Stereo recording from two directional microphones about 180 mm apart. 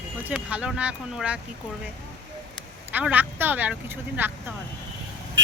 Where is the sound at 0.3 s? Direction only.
5° right (ahead or behind).